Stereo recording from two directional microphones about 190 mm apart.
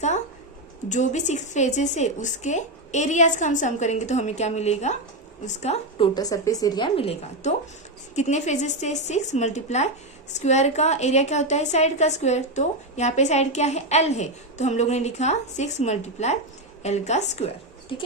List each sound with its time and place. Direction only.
0.9 s a woman's voice: 40° left (ahead or behind)
6.1 s a woman's voice: 20° left (ahead or behind)